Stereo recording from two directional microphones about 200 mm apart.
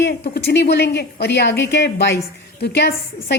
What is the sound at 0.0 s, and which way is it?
A woman's voice, 55° left (ahead or behind).